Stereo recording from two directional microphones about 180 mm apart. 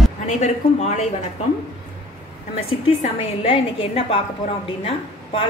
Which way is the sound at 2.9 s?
30° left (ahead or behind).